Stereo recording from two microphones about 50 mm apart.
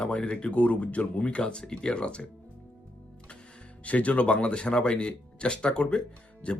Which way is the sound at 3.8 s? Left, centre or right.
Left.